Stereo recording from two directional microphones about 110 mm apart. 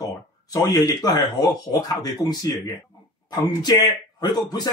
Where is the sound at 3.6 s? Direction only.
40° left (ahead or behind).